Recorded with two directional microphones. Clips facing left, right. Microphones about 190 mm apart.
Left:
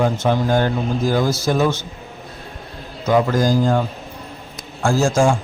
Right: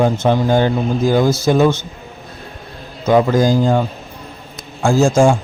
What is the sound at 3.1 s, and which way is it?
A man's voice, 20° right (ahead or behind).